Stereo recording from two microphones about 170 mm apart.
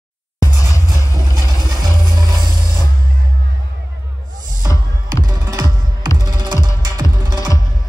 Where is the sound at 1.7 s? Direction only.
25° right (ahead or behind).